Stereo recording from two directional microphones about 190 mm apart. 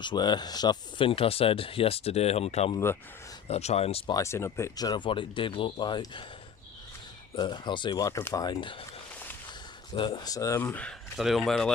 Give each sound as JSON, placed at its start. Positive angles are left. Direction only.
{"t": 0.0, "sound": "speech", "side_deg": 25}
{"t": 2.7, "sound": "speech", "side_deg": 10}
{"t": 3.5, "sound": "speech", "side_deg": 35}
{"t": 4.1, "sound": "speech", "side_deg": 15}
{"t": 7.3, "sound": "speech", "side_deg": 25}
{"t": 9.9, "sound": "speech", "side_deg": 25}